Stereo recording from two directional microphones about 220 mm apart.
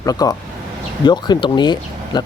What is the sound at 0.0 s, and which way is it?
Speech, 15° left (ahead or behind).